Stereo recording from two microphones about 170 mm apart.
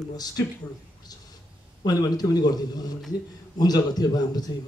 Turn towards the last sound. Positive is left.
turn(degrees=25)  # may be behind; listen again after turning